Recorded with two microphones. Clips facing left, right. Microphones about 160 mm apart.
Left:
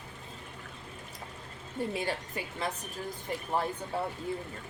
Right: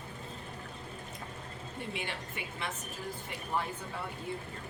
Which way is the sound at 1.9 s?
40° left (ahead or behind).